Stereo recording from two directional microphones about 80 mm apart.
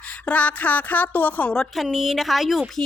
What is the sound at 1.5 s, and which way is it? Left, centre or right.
Speech, centre.